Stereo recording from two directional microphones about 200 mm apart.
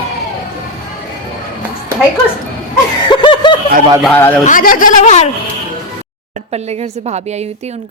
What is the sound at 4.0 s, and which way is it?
Speech, 10° left (ahead or behind).